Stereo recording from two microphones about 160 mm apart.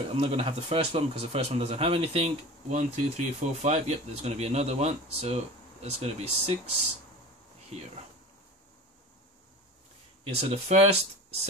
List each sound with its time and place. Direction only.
0.1 s speech: 35° right (ahead or behind)
10.2 s speech: 40° right (ahead or behind)